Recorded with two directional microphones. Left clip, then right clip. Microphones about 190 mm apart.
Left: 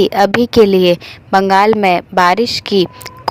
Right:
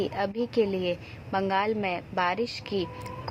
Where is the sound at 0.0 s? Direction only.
40° left (ahead or behind).